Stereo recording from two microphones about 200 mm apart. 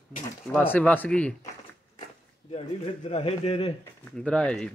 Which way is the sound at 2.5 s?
30° left (ahead or behind).